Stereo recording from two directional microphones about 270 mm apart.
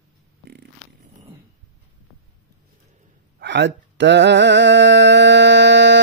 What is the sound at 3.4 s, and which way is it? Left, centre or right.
Mantra, right.